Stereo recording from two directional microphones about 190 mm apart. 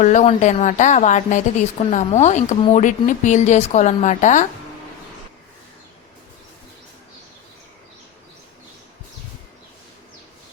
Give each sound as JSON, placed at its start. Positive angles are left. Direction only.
{"t": 0.0, "sound": "a woman's voice", "side_deg": 40}